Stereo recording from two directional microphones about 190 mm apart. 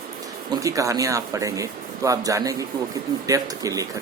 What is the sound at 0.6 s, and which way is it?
A woman's voice, 15° right (ahead or behind).